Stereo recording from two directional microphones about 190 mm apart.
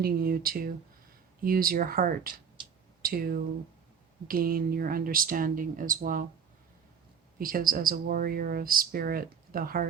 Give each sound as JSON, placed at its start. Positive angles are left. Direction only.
{"t": 0.0, "sound": "speech", "side_deg": -50}
{"t": 7.3, "sound": "speech", "side_deg": -50}